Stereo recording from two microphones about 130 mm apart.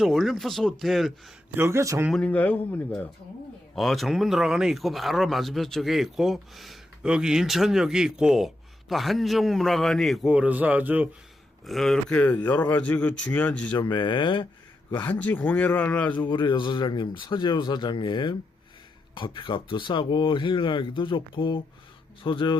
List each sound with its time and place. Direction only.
0.0 s speech: centre (ahead or behind)
1.5 s speech: 20° right (ahead or behind)
2.1 s speech: 10° left (ahead or behind)
3.8 s speech: centre (ahead or behind)
10.3 s a man's voice: 10° right (ahead or behind)
11.6 s speech: centre (ahead or behind)
13.7 s speech: 35° left (ahead or behind)
15.0 s speech: 10° left (ahead or behind)
16.3 s speech: 35° left (ahead or behind)